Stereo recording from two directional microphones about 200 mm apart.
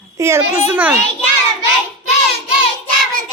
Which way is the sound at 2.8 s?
45° right (ahead or behind).